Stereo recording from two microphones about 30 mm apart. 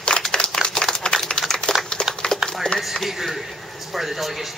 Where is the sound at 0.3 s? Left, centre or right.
Left.